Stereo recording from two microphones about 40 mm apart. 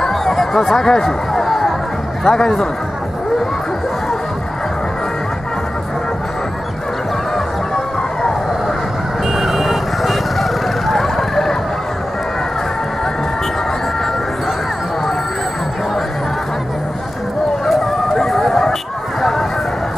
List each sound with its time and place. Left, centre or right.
0.0 s chatter: centre
2.2 s a man's voice: centre
7.3 s music: centre
9.4 s vehicle: centre
18.1 s music: centre